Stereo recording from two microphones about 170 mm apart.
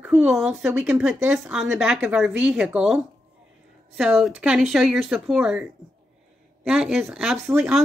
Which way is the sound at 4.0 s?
5° right (ahead or behind).